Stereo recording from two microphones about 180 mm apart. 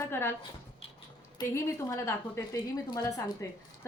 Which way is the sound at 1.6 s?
15° left (ahead or behind).